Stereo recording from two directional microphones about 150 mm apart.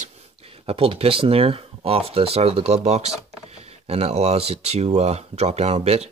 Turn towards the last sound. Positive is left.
turn(degrees=-45)  # may be behind; listen again after turning